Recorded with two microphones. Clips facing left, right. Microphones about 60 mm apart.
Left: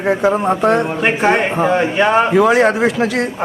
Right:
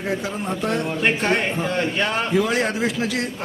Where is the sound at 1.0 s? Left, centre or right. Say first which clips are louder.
Left 6 dB; centre.